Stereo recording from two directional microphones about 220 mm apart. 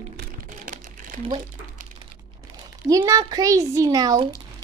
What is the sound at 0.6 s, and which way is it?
Crumpling, 40° right (ahead or behind).